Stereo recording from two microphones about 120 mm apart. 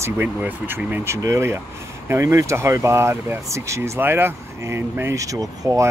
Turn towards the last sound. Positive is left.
turn(degrees=-25)  # may be behind; listen again after turning